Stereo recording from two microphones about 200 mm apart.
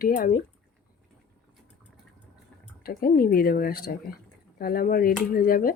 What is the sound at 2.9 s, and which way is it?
Speech, 45° left (ahead or behind).